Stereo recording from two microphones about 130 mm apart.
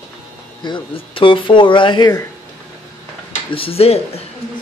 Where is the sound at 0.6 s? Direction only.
35° left (ahead or behind).